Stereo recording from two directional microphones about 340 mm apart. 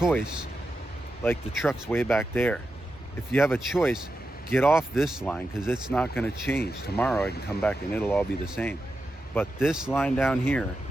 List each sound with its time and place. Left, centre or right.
0.0 s speech: centre